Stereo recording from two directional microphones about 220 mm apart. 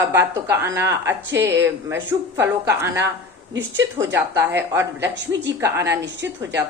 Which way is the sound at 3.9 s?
10° right (ahead or behind).